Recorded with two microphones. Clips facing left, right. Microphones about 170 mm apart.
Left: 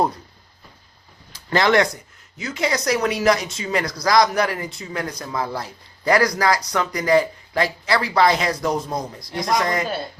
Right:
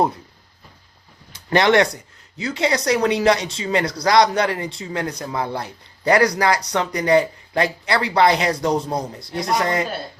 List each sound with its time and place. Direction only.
1.5 s speech: 30° right (ahead or behind)